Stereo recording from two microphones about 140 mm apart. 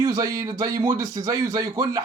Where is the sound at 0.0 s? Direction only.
25° right (ahead or behind).